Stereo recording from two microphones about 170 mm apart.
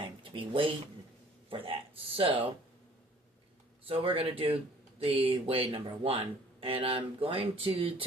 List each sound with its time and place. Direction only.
0.0 s a sound: 30° right (ahead or behind)
1.5 s speech: 30° right (ahead or behind)
3.8 s speech: 35° right (ahead or behind)